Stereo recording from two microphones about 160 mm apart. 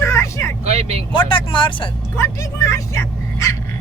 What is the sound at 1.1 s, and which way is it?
Speech, 30° left (ahead or behind).